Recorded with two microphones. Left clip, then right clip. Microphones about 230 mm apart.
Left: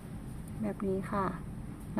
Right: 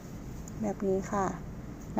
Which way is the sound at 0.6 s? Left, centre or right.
Left.